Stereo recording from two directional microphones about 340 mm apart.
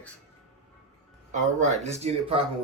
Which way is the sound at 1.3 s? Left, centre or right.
Centre.